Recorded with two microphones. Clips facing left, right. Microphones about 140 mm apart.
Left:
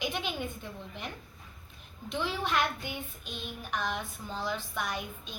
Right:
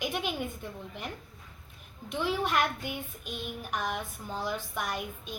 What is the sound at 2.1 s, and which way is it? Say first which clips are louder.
Child singing: right 2 dB; 10° right (ahead or behind).